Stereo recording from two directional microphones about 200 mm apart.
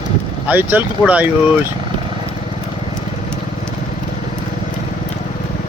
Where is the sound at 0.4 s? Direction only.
5° right (ahead or behind).